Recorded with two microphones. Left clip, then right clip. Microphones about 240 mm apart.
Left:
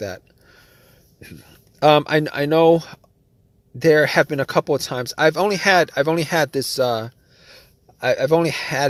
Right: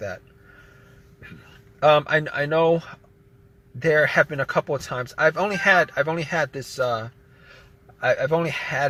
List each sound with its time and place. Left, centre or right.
1.8 s speech: left